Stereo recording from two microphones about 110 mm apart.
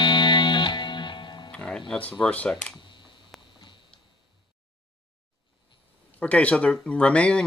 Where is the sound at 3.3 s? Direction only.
Centre (ahead or behind).